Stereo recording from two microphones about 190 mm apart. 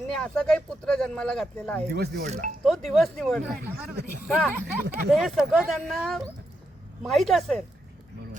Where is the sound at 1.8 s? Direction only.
55° right (ahead or behind).